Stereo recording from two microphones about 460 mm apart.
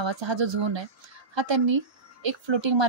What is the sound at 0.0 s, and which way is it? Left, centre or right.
Speech, right.